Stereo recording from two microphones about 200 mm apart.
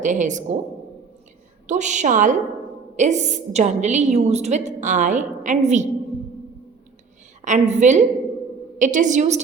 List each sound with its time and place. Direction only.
0.0 s a woman's voice: 40° right (ahead or behind)
1.6 s a woman's voice: 35° right (ahead or behind)
7.4 s a woman's voice: 35° right (ahead or behind)